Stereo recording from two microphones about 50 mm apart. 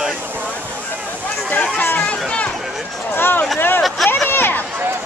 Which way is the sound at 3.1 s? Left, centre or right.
Left.